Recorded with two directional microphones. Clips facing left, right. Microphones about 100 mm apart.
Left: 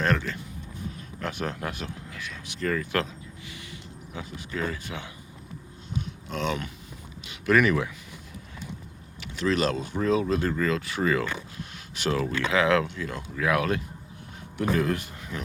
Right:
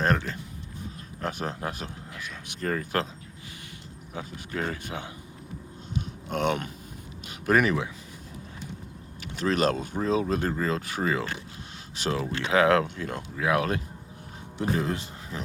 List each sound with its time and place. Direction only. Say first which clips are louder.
0.0 s speech: even; 40° right (ahead or behind)
4.1 s speech: right 1 dB; 45° right (ahead or behind)
6.2 s speech: right 3 dB; 55° right (ahead or behind)
7.3 s speech: left 1 dB; 40° right (ahead or behind)
9.2 s speech: even; 45° right (ahead or behind)
10.0 s speech: left 2 dB; 35° right (ahead or behind)
11.0 s speech: left 4 dB; 25° right (ahead or behind); by 13.2 s 45° right (ahead or behind)
13.3 s speech: left 1 dB; 30° right (ahead or behind)